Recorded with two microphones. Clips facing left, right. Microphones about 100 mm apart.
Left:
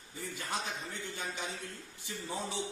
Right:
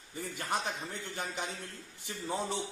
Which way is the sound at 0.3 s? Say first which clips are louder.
Right 4 dB; 55° right (ahead or behind).